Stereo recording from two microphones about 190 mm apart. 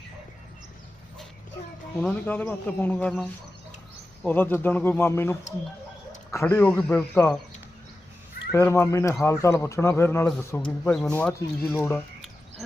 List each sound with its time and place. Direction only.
2.0 s a man's voice: 10° left (ahead or behind)
4.3 s a man's voice: 10° left (ahead or behind)
8.5 s a man's voice: 15° left (ahead or behind)